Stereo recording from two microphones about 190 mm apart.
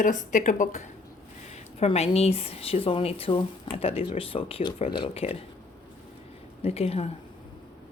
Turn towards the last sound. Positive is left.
turn(degrees=30)  # may be behind; listen again after turning